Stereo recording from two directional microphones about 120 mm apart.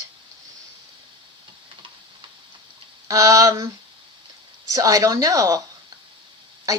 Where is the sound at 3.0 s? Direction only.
30° right (ahead or behind).